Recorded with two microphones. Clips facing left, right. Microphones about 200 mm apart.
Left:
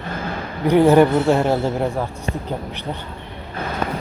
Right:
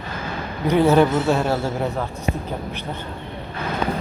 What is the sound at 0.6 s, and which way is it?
A man's voice, 15° left (ahead or behind).